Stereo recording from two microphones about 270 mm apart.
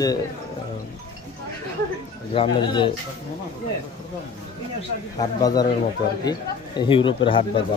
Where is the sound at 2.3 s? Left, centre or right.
Centre.